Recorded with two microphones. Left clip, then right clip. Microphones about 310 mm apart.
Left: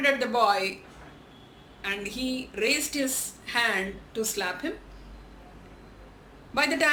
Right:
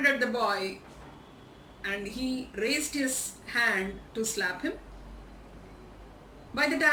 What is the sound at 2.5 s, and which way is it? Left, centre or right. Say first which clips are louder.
A woman's voice: left 4 dB; centre.